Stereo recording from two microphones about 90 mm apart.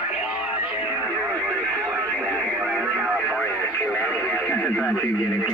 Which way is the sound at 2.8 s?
5° right (ahead or behind).